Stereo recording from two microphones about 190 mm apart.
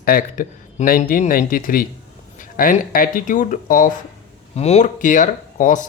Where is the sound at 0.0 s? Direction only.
50° left (ahead or behind).